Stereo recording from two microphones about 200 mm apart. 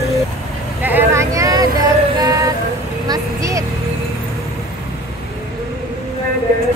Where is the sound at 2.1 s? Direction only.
15° right (ahead or behind).